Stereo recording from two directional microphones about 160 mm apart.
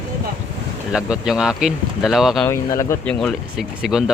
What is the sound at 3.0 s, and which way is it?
Speech, 5° left (ahead or behind).